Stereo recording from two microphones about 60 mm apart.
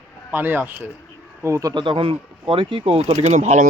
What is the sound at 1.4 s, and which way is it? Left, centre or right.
Speech, right.